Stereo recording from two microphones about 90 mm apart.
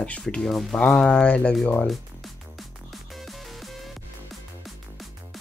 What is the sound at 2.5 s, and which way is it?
Music, centre (ahead or behind).